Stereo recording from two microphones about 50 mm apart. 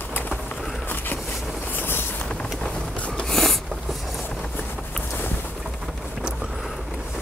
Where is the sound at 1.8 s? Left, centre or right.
Left.